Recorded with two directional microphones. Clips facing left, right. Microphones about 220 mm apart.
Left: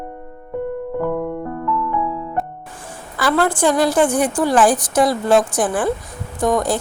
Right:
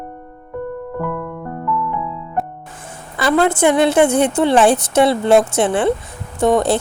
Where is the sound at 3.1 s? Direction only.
20° right (ahead or behind).